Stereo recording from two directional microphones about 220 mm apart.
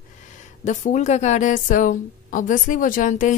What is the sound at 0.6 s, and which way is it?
Speech, 30° left (ahead or behind).